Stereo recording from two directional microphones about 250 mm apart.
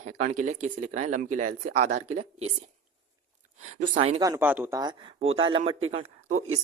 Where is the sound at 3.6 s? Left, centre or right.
Right.